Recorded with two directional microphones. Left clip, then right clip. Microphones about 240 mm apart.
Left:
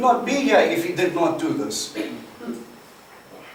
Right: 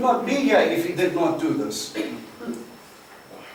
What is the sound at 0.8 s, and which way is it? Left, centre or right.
Speech, centre.